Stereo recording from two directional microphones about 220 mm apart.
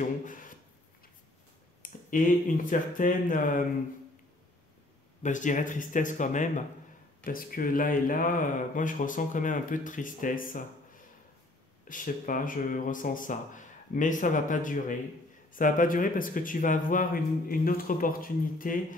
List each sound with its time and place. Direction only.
0.0 s a sound: 35° left (ahead or behind)
1.8 s speech: 40° left (ahead or behind)
5.2 s speech: 35° left (ahead or behind)
11.9 s speech: 35° left (ahead or behind)